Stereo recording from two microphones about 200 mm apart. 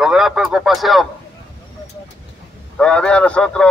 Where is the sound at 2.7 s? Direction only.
5° left (ahead or behind).